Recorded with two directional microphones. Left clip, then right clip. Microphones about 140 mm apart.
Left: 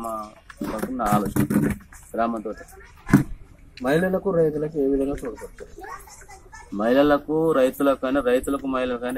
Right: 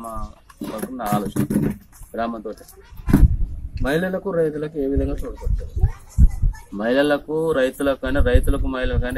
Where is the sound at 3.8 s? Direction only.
5° left (ahead or behind).